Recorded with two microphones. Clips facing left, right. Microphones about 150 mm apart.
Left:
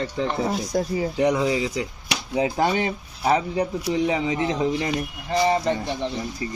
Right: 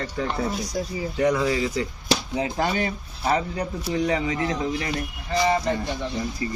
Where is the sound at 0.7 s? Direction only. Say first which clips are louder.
Left 7 dB; 60° left (ahead or behind).